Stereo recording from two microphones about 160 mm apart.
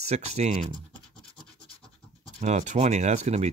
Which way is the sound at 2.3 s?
45° right (ahead or behind).